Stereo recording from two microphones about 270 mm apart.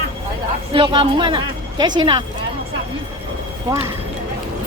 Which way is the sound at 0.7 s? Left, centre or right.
Centre.